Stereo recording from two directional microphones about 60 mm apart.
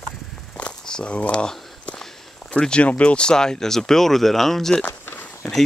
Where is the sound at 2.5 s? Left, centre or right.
Centre.